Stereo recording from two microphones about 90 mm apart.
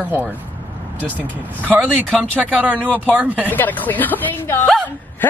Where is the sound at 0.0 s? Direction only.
20° right (ahead or behind).